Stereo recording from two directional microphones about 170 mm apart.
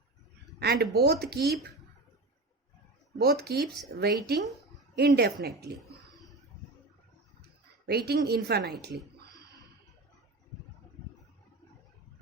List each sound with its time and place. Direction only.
0.6 s speech: 70° right (ahead or behind)
3.2 s speech: 70° right (ahead or behind)
7.9 s speech: 70° right (ahead or behind)